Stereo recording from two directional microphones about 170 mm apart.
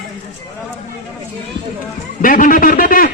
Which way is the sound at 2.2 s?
50° left (ahead or behind).